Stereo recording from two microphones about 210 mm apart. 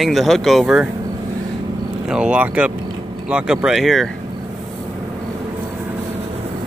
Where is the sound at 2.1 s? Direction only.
5° right (ahead or behind).